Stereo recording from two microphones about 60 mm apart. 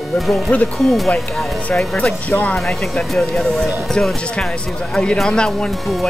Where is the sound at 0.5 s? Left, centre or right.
Left.